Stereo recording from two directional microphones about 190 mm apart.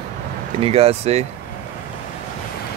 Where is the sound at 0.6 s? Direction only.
30° right (ahead or behind).